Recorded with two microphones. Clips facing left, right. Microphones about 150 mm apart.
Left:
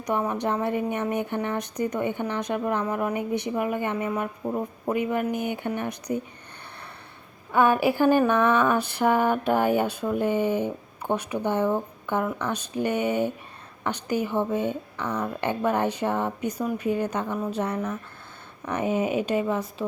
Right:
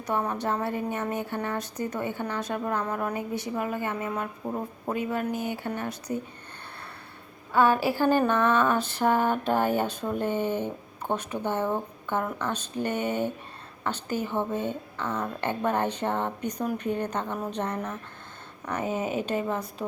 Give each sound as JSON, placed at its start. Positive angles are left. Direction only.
{"t": 0.0, "sound": "speech", "side_deg": 15}
{"t": 7.5, "sound": "speech", "side_deg": 15}